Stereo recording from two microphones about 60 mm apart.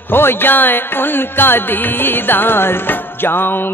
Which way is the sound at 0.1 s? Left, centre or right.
Left.